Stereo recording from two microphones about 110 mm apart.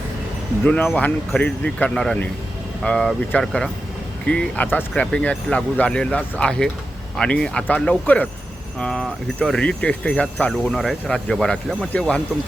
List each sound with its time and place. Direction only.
0.6 s speech: 10° left (ahead or behind)